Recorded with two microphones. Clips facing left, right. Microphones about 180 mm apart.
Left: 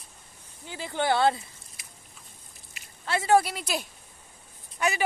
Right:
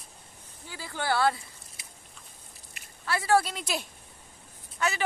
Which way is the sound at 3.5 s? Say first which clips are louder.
Left 2 dB; centre (ahead or behind).